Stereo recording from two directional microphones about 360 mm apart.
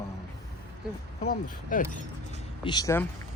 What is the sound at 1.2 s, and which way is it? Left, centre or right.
Speech, left.